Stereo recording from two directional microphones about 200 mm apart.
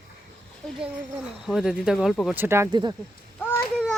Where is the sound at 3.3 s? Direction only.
5° left (ahead or behind).